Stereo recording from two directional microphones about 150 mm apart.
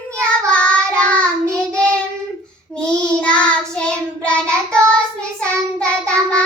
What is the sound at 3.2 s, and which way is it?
Child singing, 5° left (ahead or behind).